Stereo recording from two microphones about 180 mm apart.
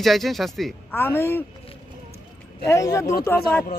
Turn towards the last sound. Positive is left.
turn(degrees=10)  # may be behind; listen again after turning